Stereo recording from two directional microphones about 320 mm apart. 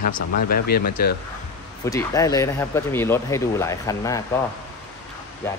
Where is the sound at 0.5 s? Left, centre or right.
Left.